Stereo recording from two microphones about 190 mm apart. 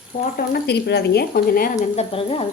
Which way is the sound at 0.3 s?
55° left (ahead or behind).